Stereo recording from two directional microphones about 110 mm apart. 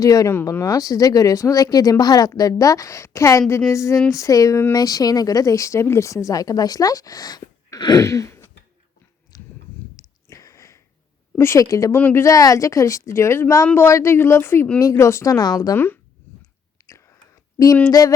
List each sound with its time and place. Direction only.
0.0 s a woman's voice: 30° left (ahead or behind)
9.3 s a sound: 35° left (ahead or behind)
11.3 s a woman's voice: 25° left (ahead or behind)
15.7 s a woman's voice: 20° left (ahead or behind)
16.8 s whispering: 30° left (ahead or behind)